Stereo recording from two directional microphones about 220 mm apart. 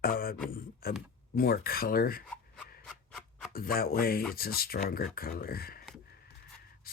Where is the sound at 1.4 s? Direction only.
45° left (ahead or behind).